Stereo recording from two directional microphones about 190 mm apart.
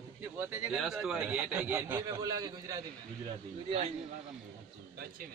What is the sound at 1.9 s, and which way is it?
Speech, 20° right (ahead or behind).